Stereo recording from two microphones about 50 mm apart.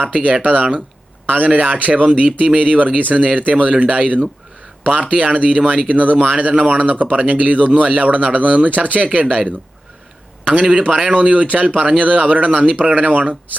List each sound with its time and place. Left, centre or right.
0.0 s speech: right